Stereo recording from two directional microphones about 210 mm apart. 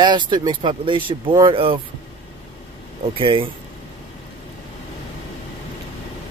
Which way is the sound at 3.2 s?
25° right (ahead or behind).